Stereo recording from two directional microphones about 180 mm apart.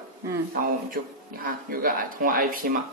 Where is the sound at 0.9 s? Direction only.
50° right (ahead or behind).